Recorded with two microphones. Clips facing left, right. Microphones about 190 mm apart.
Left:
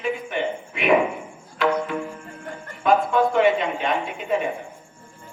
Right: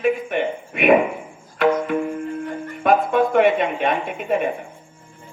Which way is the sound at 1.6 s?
55° right (ahead or behind).